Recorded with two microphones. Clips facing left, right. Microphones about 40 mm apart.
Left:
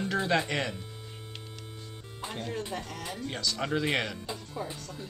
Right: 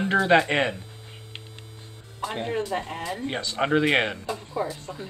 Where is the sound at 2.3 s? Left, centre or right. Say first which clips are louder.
Right 8 dB; right.